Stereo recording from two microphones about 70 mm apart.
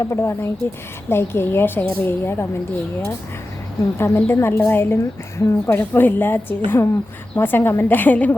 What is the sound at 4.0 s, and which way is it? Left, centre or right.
A woman's voice, left.